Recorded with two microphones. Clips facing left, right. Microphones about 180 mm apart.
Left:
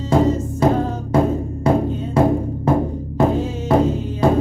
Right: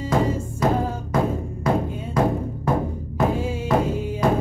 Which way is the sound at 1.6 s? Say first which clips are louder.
Left 5 dB; 30° left (ahead or behind).